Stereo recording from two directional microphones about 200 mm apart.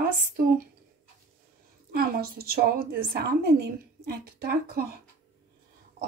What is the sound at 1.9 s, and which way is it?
A woman's voice, 50° right (ahead or behind).